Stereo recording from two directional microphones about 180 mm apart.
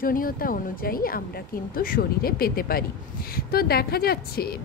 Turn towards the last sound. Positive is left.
turn(degrees=60)  # may be behind; listen again after turning